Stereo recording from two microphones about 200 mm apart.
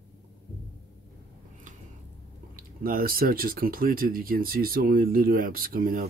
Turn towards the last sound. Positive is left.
turn(degrees=-45)  # may be behind; listen again after turning